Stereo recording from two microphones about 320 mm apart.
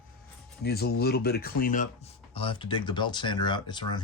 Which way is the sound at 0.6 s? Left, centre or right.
Left.